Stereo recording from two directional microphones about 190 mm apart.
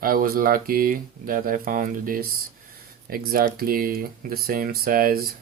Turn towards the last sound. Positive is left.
turn(degrees=-50)  # may be behind; listen again after turning